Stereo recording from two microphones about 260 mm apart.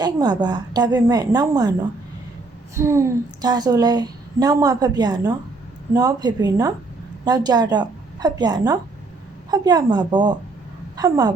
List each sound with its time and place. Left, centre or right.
0.0 s a woman's voice: centre
2.7 s a woman's voice: centre